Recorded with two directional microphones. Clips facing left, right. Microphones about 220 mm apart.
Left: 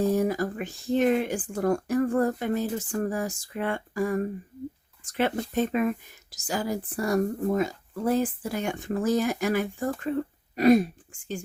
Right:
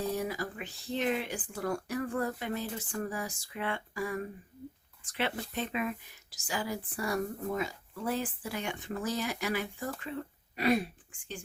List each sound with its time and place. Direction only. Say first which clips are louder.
0.0 s speech: left 9 dB; 45° left (ahead or behind)